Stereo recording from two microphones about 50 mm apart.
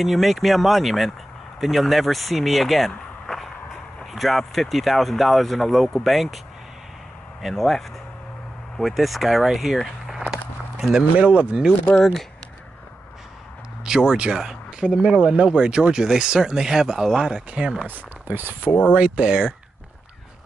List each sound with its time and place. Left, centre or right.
0.0 s speech: centre
4.0 s speech: centre
7.4 s speech: centre
8.8 s speech: centre
9.8 s a sound: centre
10.8 s speech: centre
11.1 s speech: right
12.0 s speech: centre
13.8 s speech: centre
17.5 s speech: right
17.8 s speech: right
18.7 s speech: left
18.9 s speech: right